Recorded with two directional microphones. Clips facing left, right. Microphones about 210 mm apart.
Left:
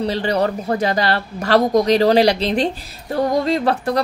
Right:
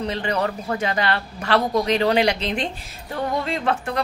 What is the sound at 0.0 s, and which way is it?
Speech, 35° left (ahead or behind).